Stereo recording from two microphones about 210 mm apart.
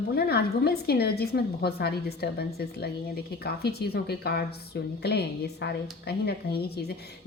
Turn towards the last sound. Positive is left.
turn(degrees=50)  # may be behind; listen again after turning